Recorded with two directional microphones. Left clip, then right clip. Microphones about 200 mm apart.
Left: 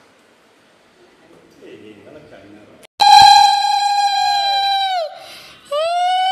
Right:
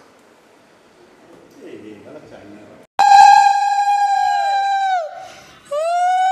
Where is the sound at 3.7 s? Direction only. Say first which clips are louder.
Even; centre (ahead or behind).